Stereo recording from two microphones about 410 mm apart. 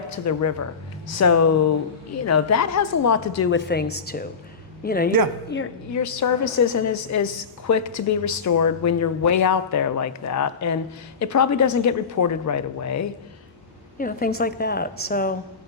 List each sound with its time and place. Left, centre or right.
0.3 s a woman's voice: left
5.9 s a woman's voice: left
14.0 s a woman's voice: centre